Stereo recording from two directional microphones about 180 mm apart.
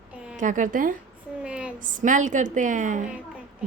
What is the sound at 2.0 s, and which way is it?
A woman's voice, 45° right (ahead or behind).